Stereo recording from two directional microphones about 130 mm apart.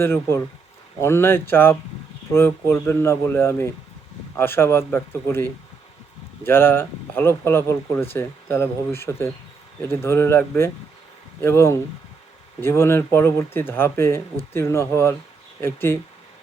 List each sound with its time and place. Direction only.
0.0 s speech: 20° left (ahead or behind)